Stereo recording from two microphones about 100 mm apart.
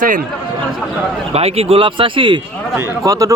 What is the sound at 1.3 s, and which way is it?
Speech, 90° right.